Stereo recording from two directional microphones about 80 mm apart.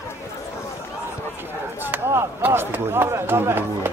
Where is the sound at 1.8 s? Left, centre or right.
Right.